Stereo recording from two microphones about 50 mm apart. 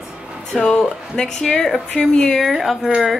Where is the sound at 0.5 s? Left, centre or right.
Centre.